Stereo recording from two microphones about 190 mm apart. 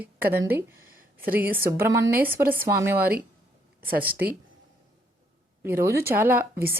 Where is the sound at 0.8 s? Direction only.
50° right (ahead or behind).